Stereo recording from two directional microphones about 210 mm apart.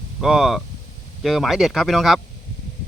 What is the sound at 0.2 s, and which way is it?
Speech, centre (ahead or behind).